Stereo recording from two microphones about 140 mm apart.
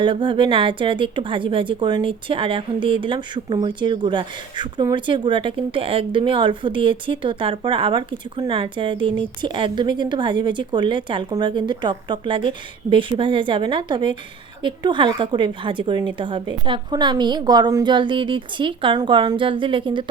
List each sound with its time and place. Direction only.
0.0 s a woman's voice: 35° right (ahead or behind)